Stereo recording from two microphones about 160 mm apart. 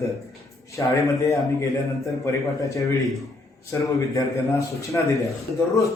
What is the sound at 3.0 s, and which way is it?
Speech, centre (ahead or behind).